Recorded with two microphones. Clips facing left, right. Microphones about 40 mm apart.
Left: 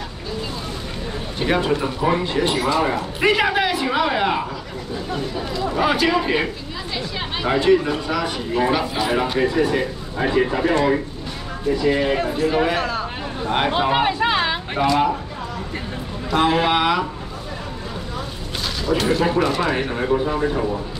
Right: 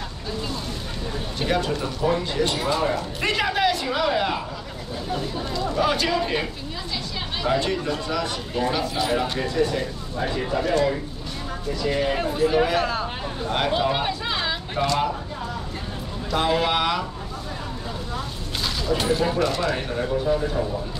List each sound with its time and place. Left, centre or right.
1.4 s speech: left
5.7 s speech: centre
10.1 s speech: left
12.4 s speech: centre
13.4 s speech: left
14.8 s speech: centre
16.3 s speech: centre
19.4 s speech: centre
19.7 s speech: left